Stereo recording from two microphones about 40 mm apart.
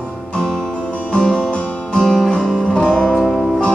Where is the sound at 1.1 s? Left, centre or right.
Left.